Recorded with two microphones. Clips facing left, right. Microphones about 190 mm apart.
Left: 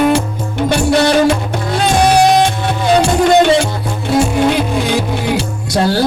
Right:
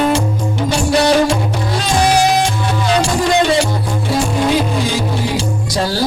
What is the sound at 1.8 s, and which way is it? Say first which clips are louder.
Music: left 3 dB; 60° left (ahead or behind).